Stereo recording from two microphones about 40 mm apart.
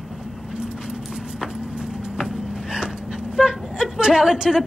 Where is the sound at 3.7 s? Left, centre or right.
Centre.